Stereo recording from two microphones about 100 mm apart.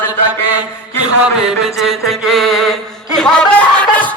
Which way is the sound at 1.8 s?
Centre (ahead or behind).